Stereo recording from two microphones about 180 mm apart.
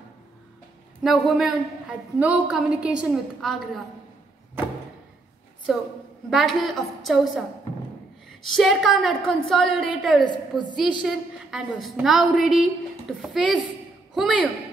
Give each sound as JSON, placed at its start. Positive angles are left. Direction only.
{"t": 1.0, "sound": "a woman's voice", "side_deg": 0}
{"t": 5.7, "sound": "a woman's voice", "side_deg": 0}